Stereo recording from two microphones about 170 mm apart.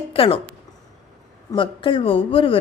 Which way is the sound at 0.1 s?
35° left (ahead or behind).